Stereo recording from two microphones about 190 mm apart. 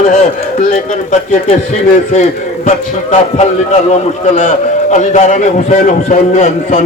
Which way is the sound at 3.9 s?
40° left (ahead or behind).